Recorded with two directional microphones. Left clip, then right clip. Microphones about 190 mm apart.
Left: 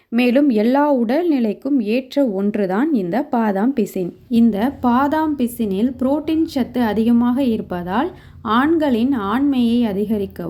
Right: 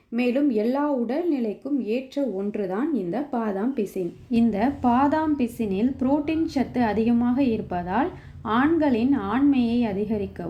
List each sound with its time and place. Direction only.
0.1 s a woman's voice: 45° left (ahead or behind)
4.3 s a woman's voice: 25° left (ahead or behind)